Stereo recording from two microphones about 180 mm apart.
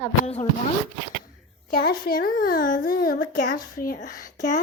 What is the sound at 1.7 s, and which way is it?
Speech, 55° left (ahead or behind).